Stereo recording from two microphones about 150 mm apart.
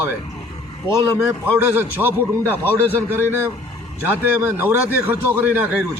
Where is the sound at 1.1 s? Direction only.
15° right (ahead or behind).